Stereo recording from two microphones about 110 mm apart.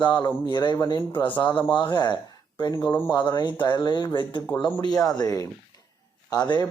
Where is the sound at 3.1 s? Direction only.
40° left (ahead or behind).